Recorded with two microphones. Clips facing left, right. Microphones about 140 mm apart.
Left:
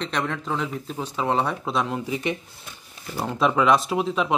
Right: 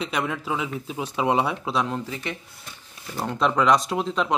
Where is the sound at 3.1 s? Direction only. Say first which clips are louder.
Left 1 dB; 5° left (ahead or behind).